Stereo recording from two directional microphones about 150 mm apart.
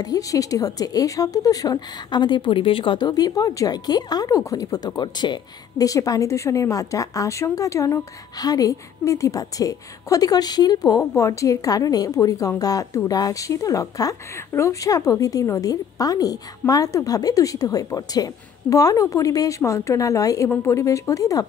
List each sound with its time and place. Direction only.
0.0 s a woman's voice: 25° left (ahead or behind)